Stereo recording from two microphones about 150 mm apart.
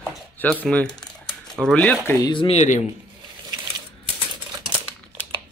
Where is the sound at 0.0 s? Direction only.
5° left (ahead or behind).